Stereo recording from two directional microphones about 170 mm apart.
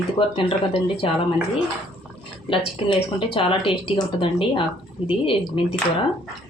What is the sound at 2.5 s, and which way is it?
Speech, 30° left (ahead or behind).